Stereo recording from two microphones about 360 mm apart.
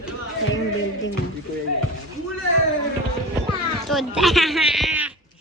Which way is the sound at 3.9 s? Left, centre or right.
Centre.